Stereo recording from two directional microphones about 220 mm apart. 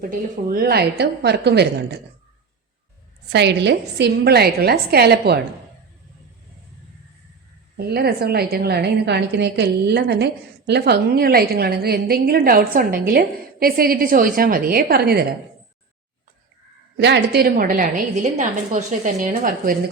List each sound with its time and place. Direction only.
0.0 s a woman's voice: 40° right (ahead or behind)
3.3 s a woman's voice: 50° right (ahead or behind)
7.8 s a woman's voice: 45° right (ahead or behind)
17.0 s a woman's voice: 50° right (ahead or behind)